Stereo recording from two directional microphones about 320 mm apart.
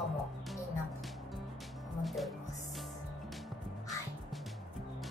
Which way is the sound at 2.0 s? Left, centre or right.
Centre.